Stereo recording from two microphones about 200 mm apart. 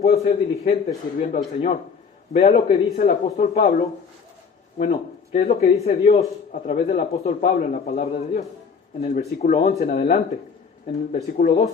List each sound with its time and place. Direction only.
0.0 s a man's voice: 35° left (ahead or behind)